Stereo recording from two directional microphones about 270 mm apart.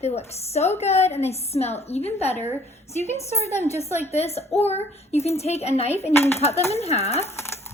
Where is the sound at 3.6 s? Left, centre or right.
Left.